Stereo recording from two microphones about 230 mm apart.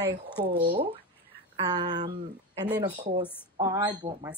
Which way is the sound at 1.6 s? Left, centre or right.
Centre.